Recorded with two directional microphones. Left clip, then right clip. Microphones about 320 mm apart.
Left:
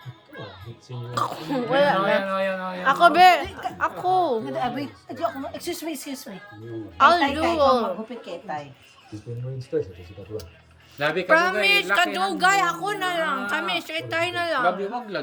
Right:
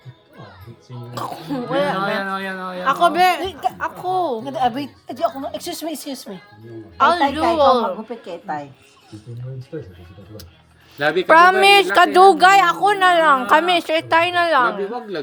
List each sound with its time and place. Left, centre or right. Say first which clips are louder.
1.1 s speech: left 1 dB; centre
4.4 s speech: right 7 dB; right
6.9 s speech: right 2 dB; centre
10.9 s speech: right 7 dB; centre